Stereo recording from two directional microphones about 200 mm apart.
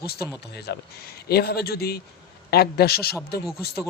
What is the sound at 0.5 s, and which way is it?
Speech, 55° left (ahead or behind).